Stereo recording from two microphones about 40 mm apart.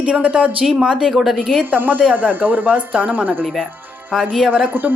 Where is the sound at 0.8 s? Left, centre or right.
Centre.